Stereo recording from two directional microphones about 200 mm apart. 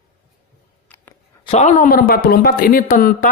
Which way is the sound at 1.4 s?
30° left (ahead or behind).